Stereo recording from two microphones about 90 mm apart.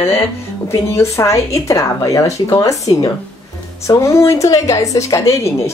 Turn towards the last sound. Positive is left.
turn(degrees=35)  # may be behind; listen again after turning